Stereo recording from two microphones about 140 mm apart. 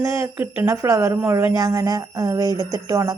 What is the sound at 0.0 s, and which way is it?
A woman's voice, 20° right (ahead or behind).